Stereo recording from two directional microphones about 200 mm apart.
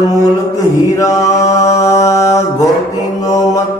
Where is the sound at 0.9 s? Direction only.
15° left (ahead or behind).